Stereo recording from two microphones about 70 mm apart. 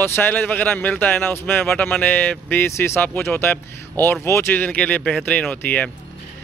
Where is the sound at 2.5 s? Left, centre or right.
Left.